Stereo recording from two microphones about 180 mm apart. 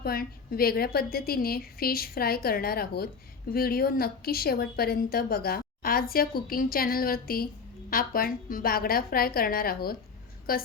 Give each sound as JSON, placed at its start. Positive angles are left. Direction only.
{"t": 0.0, "sound": "a woman's voice", "side_deg": 55}